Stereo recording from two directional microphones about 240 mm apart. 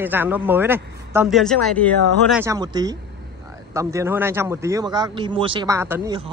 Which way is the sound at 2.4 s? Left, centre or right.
Centre.